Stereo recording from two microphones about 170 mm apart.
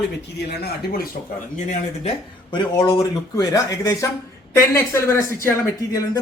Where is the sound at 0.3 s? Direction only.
70° left (ahead or behind).